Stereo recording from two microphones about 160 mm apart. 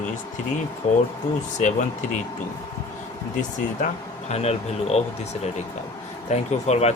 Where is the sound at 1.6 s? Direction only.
50° left (ahead or behind).